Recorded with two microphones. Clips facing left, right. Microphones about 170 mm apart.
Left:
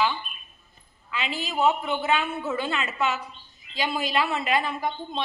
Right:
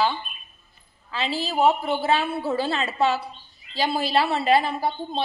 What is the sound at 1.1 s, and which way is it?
A woman's voice, 35° right (ahead or behind).